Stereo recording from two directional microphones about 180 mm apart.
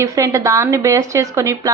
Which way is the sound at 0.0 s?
15° right (ahead or behind).